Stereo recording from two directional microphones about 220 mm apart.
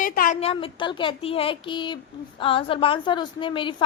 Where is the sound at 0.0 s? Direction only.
40° left (ahead or behind).